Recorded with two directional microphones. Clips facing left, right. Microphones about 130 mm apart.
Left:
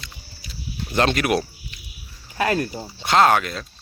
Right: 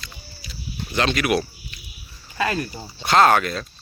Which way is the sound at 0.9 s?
45° left (ahead or behind).